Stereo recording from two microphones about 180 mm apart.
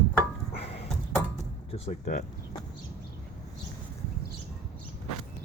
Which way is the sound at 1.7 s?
35° left (ahead or behind).